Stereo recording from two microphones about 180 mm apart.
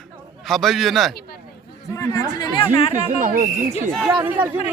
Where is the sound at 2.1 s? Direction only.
20° left (ahead or behind).